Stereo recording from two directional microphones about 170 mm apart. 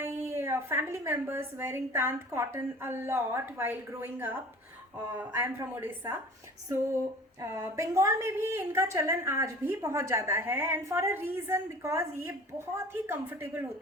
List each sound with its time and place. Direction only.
0.0 s a woman's voice: 15° right (ahead or behind)